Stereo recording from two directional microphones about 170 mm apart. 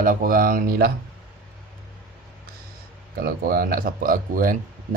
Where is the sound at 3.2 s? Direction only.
60° right (ahead or behind).